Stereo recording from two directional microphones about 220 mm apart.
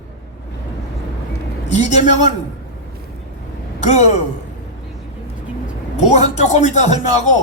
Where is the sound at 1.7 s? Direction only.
30° left (ahead or behind).